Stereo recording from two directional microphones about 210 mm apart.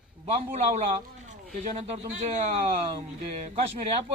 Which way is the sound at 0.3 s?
30° right (ahead or behind).